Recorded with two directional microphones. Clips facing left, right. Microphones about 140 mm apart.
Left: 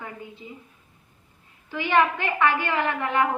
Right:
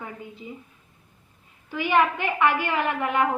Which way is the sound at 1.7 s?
10° right (ahead or behind).